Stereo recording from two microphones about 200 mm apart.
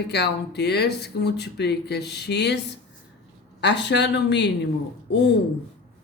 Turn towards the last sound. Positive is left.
turn(degrees=60)  # may be behind; listen again after turning